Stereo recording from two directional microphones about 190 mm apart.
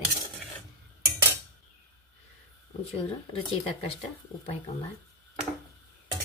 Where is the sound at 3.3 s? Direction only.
30° left (ahead or behind).